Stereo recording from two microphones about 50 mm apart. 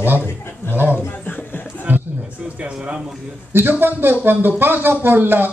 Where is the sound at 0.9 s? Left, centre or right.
Left.